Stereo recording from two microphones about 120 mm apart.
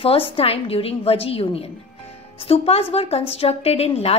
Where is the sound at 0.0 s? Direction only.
50° left (ahead or behind).